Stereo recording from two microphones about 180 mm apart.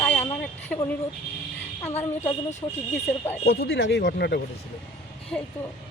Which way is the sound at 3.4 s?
65° left (ahead or behind).